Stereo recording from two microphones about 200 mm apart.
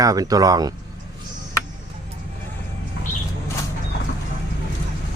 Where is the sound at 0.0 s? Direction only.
20° right (ahead or behind).